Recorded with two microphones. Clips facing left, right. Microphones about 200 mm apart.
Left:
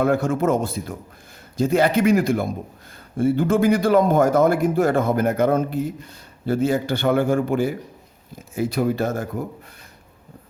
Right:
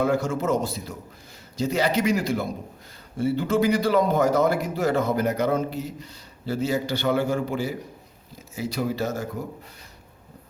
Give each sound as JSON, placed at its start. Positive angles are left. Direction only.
{"t": 0.0, "sound": "a man's voice", "side_deg": 55}